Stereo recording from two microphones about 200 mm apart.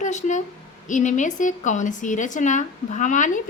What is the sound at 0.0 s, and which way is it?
A woman's voice, 35° left (ahead or behind).